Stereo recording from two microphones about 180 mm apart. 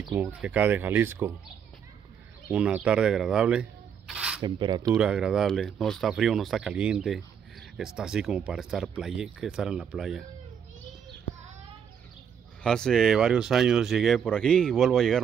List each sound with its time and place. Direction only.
0.1 s speech: 10° right (ahead or behind)
2.5 s speech: 5° right (ahead or behind)
4.1 s a sound: 5° right (ahead or behind)
4.4 s speech: 25° right (ahead or behind)
4.9 s speech: 5° right (ahead or behind)
12.6 s speech: 5° left (ahead or behind)